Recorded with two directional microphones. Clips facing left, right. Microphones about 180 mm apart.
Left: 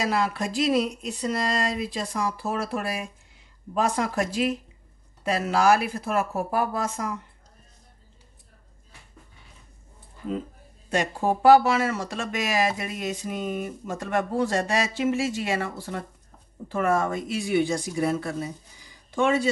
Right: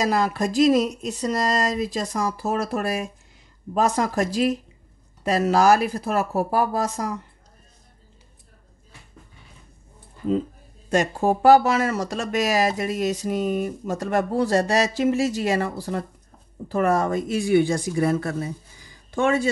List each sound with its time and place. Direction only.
0.0 s speech: 40° right (ahead or behind)
10.9 s speech: 45° right (ahead or behind)